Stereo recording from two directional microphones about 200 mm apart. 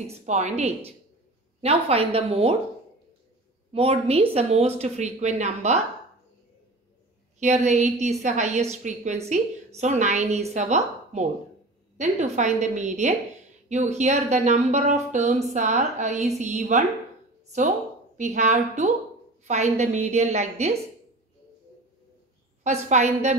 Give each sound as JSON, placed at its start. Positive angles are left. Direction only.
{"t": 0.0, "sound": "a woman's voice", "side_deg": -35}
{"t": 3.7, "sound": "speech", "side_deg": -30}
{"t": 7.3, "sound": "a woman's voice", "side_deg": -35}
{"t": 22.6, "sound": "speech", "side_deg": -35}